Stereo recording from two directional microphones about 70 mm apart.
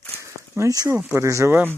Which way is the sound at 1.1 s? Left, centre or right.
Right.